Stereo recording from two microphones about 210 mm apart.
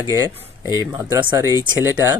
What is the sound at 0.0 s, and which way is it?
Speech, 15° right (ahead or behind).